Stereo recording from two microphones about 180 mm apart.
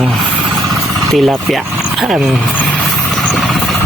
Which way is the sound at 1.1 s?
Centre (ahead or behind).